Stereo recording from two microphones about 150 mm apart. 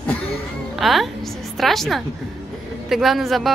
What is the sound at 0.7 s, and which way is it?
A man's voice, centre (ahead or behind).